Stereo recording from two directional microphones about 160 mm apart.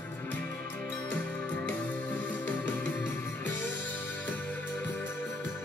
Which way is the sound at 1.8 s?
10° left (ahead or behind).